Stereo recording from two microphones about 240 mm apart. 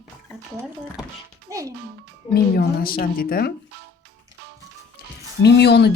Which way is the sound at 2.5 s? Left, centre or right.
Left.